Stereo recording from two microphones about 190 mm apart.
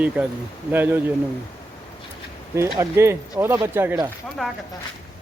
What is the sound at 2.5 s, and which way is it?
Speech, 15° right (ahead or behind).